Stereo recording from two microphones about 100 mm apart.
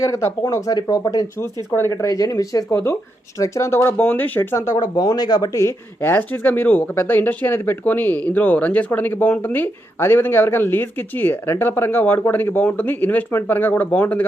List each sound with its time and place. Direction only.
0.0 s speech: 30° left (ahead or behind)
4.9 s speech: 45° left (ahead or behind)
5.5 s speech: 25° left (ahead or behind)